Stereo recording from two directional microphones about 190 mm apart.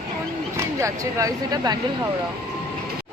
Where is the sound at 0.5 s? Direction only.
15° right (ahead or behind).